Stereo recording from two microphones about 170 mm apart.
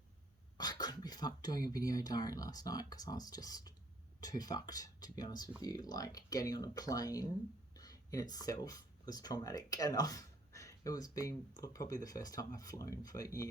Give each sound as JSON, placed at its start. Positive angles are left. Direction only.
{"t": 0.5, "sound": "speech", "side_deg": 25}